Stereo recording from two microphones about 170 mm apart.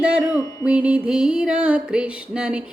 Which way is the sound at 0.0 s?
5° right (ahead or behind).